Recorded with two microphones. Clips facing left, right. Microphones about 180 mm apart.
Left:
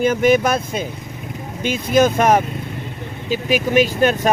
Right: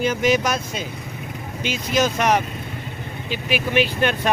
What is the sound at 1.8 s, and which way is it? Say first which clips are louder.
Speech: left 5 dB; 55° left (ahead or behind).